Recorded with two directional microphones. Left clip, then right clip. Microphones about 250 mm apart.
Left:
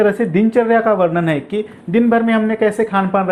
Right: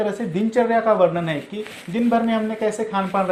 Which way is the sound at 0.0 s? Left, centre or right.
Left.